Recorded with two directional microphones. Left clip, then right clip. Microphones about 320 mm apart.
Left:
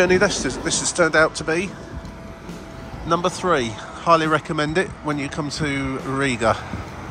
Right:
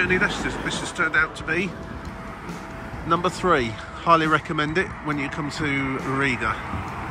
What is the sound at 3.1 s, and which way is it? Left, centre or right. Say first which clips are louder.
Speech: left 1 dB; centre.